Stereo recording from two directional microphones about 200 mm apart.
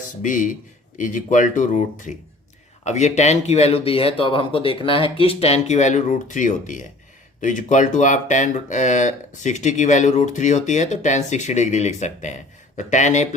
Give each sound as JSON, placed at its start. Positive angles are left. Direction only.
{"t": 0.2, "sound": "speech", "side_deg": 40}